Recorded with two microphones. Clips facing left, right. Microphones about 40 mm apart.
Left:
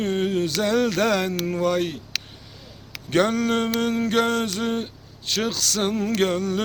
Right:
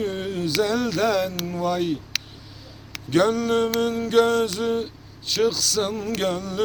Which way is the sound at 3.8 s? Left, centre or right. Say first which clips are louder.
Right 2 dB; left.